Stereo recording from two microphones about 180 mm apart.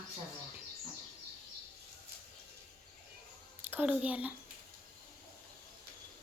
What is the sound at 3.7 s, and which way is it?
Child singing, 10° right (ahead or behind).